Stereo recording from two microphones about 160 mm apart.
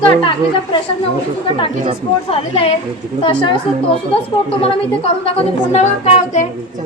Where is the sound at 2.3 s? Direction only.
40° left (ahead or behind).